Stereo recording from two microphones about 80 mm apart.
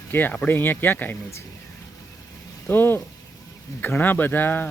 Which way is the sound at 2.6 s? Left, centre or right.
Left.